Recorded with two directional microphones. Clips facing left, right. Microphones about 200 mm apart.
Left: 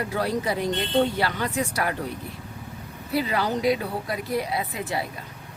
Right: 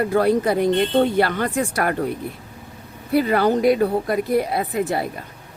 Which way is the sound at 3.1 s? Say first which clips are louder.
Right 7 dB; 55° right (ahead or behind).